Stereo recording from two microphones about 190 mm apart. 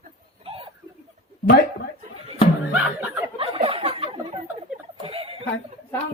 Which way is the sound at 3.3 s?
30° right (ahead or behind).